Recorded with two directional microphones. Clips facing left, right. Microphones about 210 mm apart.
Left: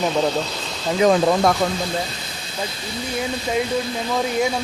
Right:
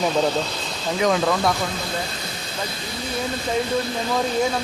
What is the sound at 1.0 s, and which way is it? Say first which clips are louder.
Speech: left 4 dB; 30° left (ahead or behind).